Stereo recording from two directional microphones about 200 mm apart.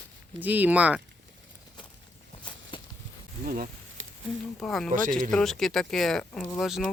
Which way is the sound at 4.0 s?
80° right.